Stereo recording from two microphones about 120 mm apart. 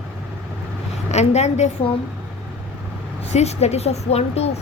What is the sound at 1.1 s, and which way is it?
Speech, 65° left (ahead or behind).